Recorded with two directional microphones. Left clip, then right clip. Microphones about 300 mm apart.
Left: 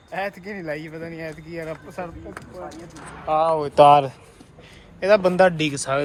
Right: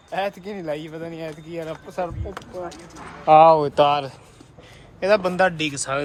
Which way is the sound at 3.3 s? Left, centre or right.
Right.